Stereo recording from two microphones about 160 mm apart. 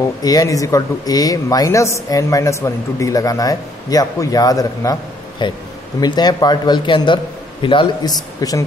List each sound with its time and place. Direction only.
0.0 s speech: 20° left (ahead or behind)